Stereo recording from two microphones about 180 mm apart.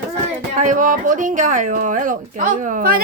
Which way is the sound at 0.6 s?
45° right (ahead or behind).